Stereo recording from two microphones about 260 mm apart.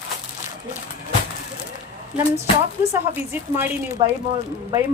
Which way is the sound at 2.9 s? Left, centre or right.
Centre.